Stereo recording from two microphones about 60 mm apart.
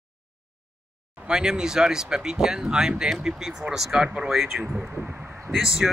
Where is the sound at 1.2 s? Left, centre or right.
Centre.